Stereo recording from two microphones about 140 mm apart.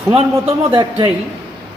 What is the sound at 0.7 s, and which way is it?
Speech, 30° right (ahead or behind).